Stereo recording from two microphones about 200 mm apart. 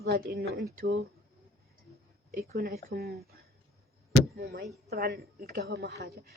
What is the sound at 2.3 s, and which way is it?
Speech, 50° right (ahead or behind).